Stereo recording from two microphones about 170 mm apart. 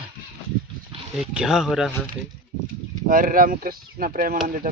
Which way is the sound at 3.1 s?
55° right (ahead or behind).